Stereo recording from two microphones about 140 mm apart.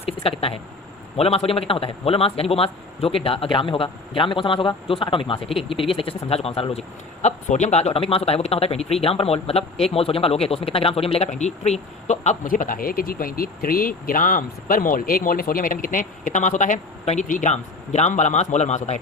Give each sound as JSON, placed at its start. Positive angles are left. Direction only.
{"t": 0.0, "sound": "a man's voice", "side_deg": 40}